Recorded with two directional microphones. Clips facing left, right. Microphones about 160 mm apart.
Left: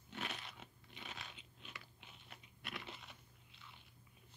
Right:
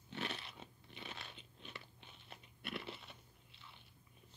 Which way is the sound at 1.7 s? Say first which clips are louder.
Right 2 dB; 30° right (ahead or behind).